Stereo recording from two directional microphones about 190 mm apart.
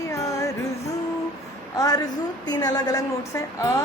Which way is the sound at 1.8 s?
20° left (ahead or behind).